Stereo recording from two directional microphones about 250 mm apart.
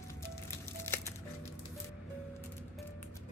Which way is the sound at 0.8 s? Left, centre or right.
Centre.